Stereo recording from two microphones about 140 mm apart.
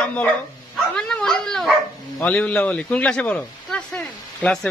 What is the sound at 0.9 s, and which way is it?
Dog, 5° left (ahead or behind).